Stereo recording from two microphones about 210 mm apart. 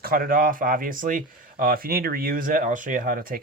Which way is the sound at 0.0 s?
45° right (ahead or behind).